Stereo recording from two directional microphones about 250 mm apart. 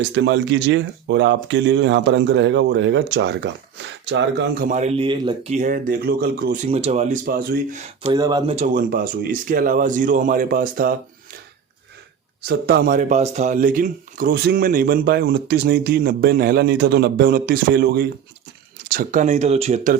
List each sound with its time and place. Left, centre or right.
0.0 s speech: right
6.7 s speech: right
8.1 s speech: centre; by 10.9 s right
12.5 s speech: right